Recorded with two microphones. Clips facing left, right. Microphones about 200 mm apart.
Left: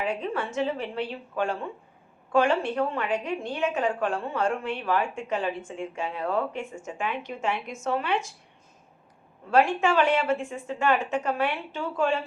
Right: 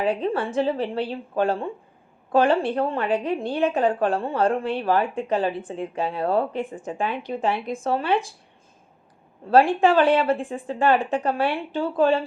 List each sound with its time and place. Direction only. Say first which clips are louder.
0.0 s a woman's voice: right 6 dB; 35° right (ahead or behind)
9.5 s a woman's voice: right 5 dB; 35° right (ahead or behind)